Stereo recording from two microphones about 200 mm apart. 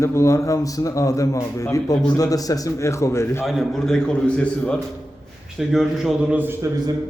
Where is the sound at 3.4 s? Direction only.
Centre (ahead or behind).